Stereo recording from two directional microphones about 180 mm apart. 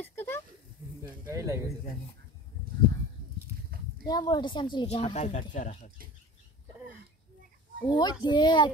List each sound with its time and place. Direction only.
0.0 s a sound: 10° left (ahead or behind)
1.3 s speech: 15° right (ahead or behind)
4.0 s a woman's voice: 20° left (ahead or behind); by 5.9 s 45° left (ahead or behind)
7.9 s speech: 25° left (ahead or behind)